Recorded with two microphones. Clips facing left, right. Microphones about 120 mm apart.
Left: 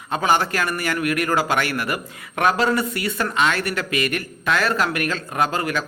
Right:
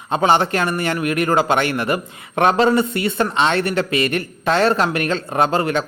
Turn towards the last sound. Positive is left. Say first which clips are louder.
# right 5 dB
turn(degrees=-30)  # may be behind; listen again after turning